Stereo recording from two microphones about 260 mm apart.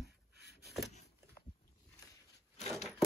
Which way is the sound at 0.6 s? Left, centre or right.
Centre.